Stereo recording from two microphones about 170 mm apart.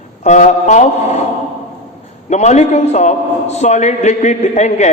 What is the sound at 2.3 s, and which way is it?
A man's voice, 40° left (ahead or behind).